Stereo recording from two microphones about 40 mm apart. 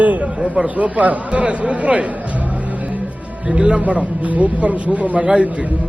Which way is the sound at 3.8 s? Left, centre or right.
Right.